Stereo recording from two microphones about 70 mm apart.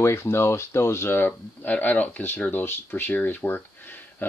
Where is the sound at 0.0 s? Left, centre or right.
Left.